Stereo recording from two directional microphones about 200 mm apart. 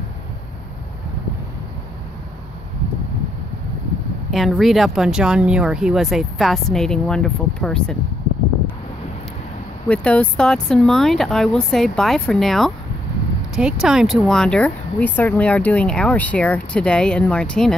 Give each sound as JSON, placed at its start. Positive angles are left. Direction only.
{"t": 4.3, "sound": "speech", "side_deg": 0}
{"t": 9.8, "sound": "speech", "side_deg": 5}